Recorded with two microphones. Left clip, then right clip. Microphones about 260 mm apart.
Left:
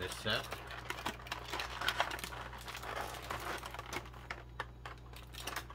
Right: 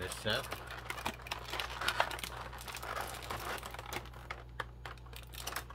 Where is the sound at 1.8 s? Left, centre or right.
Centre.